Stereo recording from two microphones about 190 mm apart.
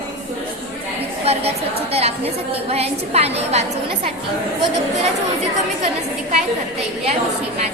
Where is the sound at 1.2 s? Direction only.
30° right (ahead or behind).